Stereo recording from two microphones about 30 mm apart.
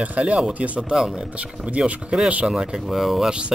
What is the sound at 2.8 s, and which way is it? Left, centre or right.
Speech, centre.